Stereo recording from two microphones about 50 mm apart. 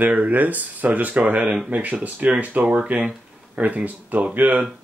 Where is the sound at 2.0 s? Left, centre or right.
Right.